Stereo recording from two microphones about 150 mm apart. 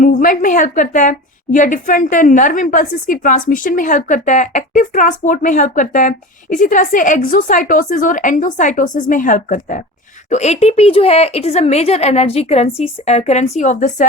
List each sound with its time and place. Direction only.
0.0 s a sound: 65° left (ahead or behind)
1.5 s a woman's voice: 60° left (ahead or behind)
10.2 s speech: 50° left (ahead or behind)